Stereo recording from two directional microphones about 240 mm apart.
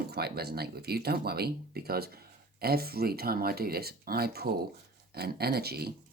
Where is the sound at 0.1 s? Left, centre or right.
Right.